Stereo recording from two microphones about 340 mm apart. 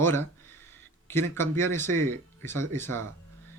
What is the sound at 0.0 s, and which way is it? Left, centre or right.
Speech, centre.